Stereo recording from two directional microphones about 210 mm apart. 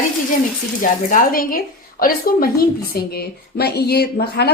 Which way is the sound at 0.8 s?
40° left (ahead or behind).